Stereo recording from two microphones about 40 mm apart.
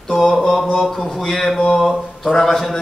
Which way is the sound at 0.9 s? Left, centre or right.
Centre.